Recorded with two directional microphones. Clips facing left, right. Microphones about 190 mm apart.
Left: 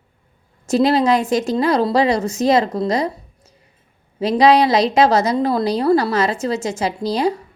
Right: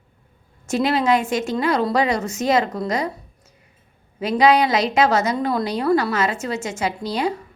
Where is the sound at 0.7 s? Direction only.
35° left (ahead or behind).